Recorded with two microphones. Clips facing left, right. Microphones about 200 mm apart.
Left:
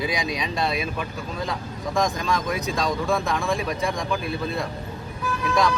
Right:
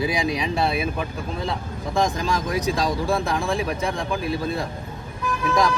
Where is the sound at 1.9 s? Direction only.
30° right (ahead or behind).